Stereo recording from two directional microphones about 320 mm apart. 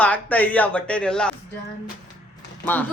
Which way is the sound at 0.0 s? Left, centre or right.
Centre.